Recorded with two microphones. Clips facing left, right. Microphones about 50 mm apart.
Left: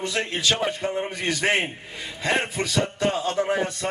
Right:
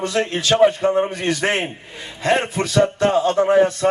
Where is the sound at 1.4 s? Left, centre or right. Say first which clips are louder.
Even; centre.